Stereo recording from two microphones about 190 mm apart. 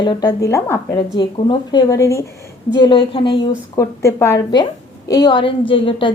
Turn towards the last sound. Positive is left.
turn(degrees=25)  # may be behind; listen again after turning